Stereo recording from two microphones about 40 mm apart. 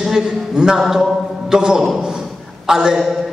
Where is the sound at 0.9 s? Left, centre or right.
Centre.